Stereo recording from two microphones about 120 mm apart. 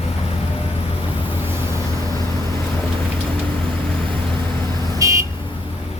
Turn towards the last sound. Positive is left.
turn(degrees=-25)  # may be behind; listen again after turning